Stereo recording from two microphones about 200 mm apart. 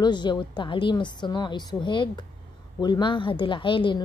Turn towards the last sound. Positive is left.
turn(degrees=25)  # may be behind; listen again after turning